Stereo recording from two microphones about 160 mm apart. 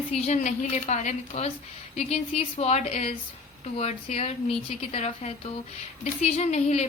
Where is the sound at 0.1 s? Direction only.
45° left (ahead or behind).